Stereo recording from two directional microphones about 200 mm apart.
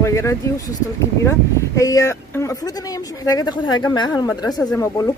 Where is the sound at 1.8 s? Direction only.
15° left (ahead or behind).